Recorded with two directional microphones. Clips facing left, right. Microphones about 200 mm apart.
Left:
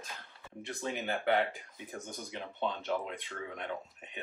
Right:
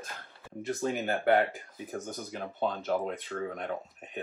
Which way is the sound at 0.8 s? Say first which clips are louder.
Right 5 dB; 45° right (ahead or behind).